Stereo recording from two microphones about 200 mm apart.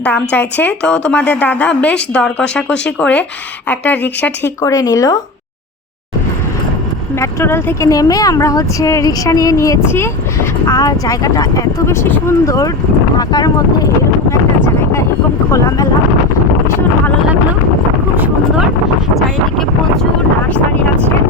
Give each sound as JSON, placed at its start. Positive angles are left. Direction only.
{"t": 0.0, "sound": "speech", "side_deg": 10}
{"t": 7.2, "sound": "speech", "side_deg": 10}
{"t": 19.1, "sound": "speech", "side_deg": 0}